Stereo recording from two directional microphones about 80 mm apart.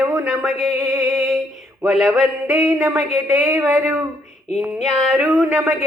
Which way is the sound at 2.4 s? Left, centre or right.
Right.